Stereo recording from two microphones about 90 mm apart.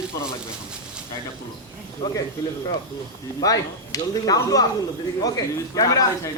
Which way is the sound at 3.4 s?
40° left (ahead or behind).